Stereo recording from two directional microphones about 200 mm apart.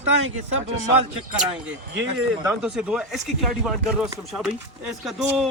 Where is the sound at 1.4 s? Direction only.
5° right (ahead or behind).